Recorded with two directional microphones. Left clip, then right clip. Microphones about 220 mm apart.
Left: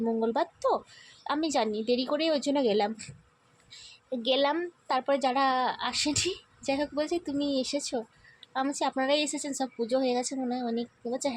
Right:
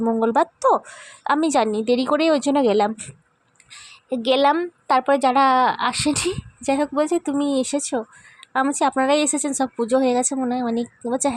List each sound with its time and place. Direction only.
0.0 s a woman's voice: 25° right (ahead or behind)